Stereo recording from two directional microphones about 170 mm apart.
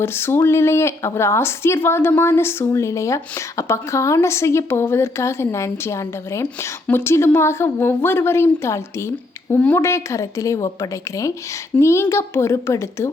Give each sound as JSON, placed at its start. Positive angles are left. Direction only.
{"t": 0.0, "sound": "a woman's voice", "side_deg": 15}